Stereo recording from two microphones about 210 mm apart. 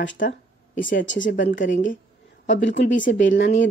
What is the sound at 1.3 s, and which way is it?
Speech, 40° left (ahead or behind).